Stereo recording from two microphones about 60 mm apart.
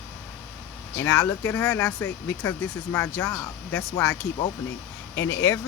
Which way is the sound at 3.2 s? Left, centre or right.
Left.